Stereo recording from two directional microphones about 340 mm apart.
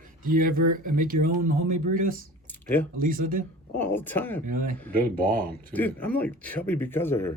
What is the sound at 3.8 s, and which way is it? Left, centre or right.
Speech, centre.